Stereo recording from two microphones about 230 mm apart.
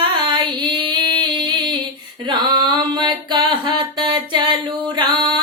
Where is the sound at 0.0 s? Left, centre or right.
Right.